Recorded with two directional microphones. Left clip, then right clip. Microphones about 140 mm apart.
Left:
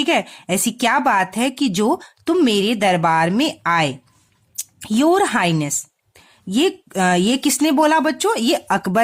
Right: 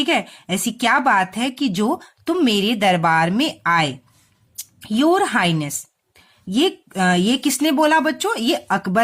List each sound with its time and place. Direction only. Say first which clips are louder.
0.0 s a woman's voice: left 1 dB; 25° left (ahead or behind)